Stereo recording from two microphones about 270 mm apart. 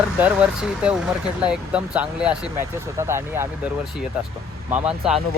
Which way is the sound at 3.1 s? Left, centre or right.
Centre.